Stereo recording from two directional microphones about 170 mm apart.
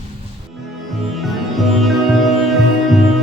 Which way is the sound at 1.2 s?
Centre (ahead or behind).